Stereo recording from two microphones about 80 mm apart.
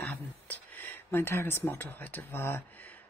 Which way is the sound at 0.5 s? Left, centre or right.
Left.